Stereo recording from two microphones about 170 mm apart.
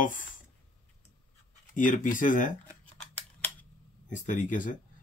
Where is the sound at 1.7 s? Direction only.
50° left (ahead or behind).